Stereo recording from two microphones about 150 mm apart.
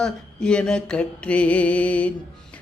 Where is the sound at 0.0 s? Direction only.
5° left (ahead or behind).